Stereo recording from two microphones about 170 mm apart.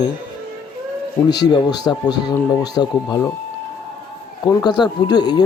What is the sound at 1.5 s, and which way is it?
Speech, 25° left (ahead or behind).